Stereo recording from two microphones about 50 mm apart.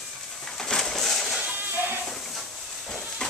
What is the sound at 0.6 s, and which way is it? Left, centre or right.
Pigeon, centre.